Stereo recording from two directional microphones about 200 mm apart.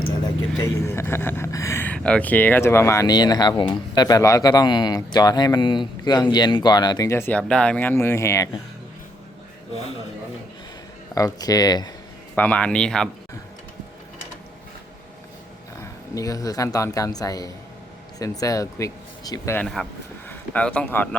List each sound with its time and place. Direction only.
0.6 s speech: 10° left (ahead or behind)
9.7 s speech: 30° left (ahead or behind)
11.1 s speech: 20° left (ahead or behind)
12.4 s speech: 5° left (ahead or behind)
15.8 s speech: 15° left (ahead or behind)
19.5 s speech: centre (ahead or behind)